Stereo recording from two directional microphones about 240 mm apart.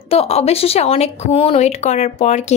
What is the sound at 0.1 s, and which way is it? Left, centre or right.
A woman's voice, left.